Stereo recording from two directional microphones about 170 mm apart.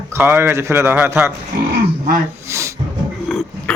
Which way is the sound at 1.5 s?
70° right (ahead or behind).